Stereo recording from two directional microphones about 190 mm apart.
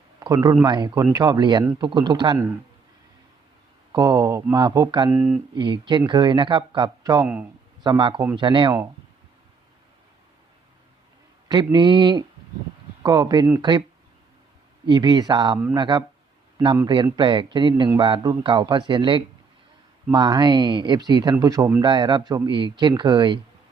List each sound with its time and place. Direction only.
0.2 s a man's voice: 15° right (ahead or behind)
3.9 s speech: 20° right (ahead or behind)
5.5 s a man's voice: 25° right (ahead or behind)
11.4 s a man's voice: 20° right (ahead or behind)
14.8 s a man's voice: 25° right (ahead or behind)